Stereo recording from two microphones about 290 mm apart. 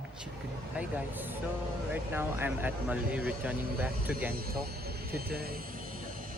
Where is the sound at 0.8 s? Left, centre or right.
Centre.